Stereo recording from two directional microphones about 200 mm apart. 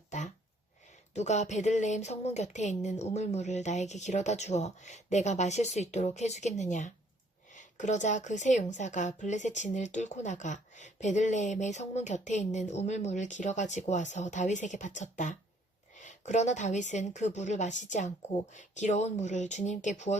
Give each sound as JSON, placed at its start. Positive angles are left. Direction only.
{"t": 1.1, "sound": "a woman's voice", "side_deg": 35}